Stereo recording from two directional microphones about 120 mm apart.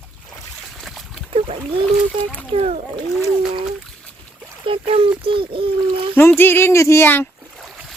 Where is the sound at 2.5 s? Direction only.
60° right (ahead or behind).